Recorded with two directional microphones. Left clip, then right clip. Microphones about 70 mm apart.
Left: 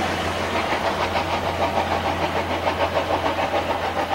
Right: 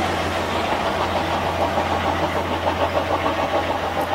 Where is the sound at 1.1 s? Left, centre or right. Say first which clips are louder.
Right 1 dB; left.